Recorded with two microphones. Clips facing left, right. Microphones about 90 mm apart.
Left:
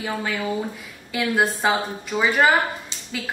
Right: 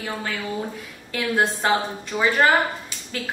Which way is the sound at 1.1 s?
5° left (ahead or behind).